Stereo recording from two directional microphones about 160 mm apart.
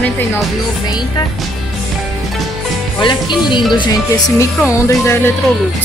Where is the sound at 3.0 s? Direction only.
30° left (ahead or behind).